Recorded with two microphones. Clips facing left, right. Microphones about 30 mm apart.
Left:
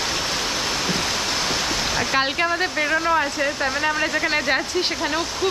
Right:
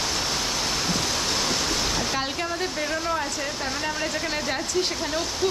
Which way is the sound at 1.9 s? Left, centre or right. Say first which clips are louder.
Left 6 dB; left.